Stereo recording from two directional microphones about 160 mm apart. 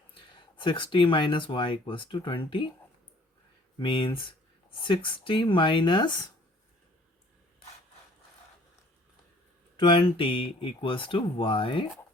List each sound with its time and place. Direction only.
0.1 s speech: 30° left (ahead or behind)
3.8 s speech: 30° left (ahead or behind)
9.7 s speech: 30° left (ahead or behind)